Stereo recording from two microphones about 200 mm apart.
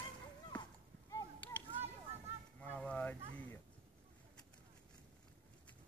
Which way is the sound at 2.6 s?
5° left (ahead or behind).